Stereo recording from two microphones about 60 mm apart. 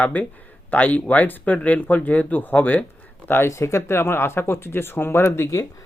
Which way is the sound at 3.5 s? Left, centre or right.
Left.